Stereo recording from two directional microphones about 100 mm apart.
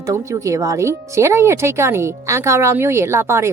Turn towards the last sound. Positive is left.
turn(degrees=-25)  # may be behind; listen again after turning